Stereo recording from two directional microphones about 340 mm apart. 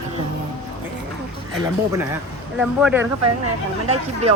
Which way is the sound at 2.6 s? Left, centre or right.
Centre.